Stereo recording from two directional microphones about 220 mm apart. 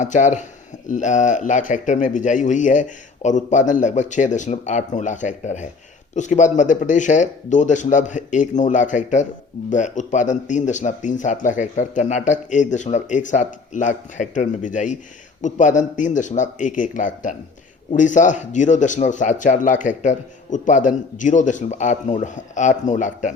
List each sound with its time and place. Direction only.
0.0 s speech: 35° left (ahead or behind)